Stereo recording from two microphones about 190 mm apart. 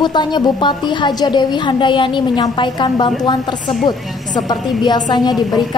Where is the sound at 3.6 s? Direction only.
Centre (ahead or behind).